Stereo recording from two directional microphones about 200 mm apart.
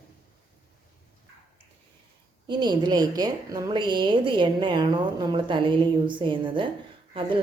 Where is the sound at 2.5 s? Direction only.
20° right (ahead or behind).